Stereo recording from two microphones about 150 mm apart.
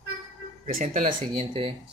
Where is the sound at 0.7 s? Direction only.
65° right (ahead or behind).